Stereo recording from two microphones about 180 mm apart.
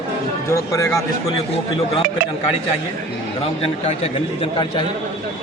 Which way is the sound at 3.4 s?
35° left (ahead or behind).